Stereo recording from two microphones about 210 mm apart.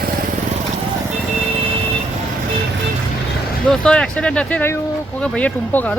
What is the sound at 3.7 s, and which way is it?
Speech, 5° left (ahead or behind).